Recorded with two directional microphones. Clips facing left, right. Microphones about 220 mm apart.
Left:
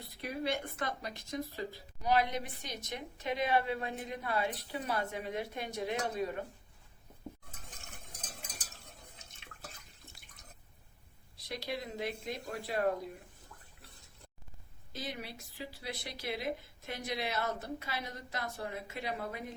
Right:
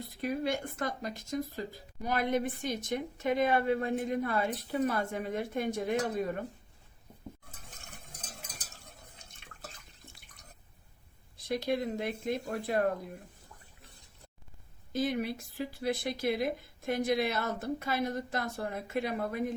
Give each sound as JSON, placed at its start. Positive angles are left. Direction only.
{"t": 0.0, "sound": "speech", "side_deg": -45}
{"t": 11.3, "sound": "speech", "side_deg": -50}
{"t": 14.9, "sound": "speech", "side_deg": -50}